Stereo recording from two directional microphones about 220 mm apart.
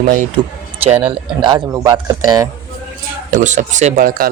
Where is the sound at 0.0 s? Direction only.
35° right (ahead or behind).